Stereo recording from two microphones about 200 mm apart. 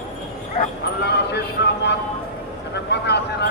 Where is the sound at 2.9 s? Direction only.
55° left (ahead or behind).